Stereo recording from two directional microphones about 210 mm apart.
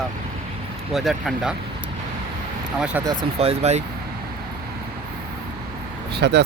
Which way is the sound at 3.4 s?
30° right (ahead or behind).